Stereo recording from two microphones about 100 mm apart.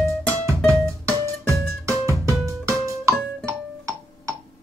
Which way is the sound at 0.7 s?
30° right (ahead or behind).